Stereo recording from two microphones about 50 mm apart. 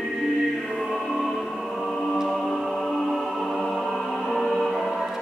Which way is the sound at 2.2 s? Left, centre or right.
Centre.